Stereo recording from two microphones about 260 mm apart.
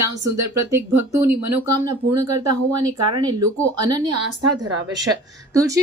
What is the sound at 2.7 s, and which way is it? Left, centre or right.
A woman's voice, centre.